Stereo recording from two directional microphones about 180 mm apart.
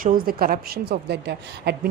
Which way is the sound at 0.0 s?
50° right (ahead or behind).